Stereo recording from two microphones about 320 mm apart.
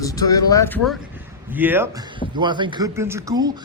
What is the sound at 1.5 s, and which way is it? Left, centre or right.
Speech, centre.